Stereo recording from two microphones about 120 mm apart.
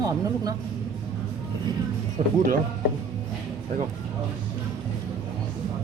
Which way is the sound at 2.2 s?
70° right (ahead or behind).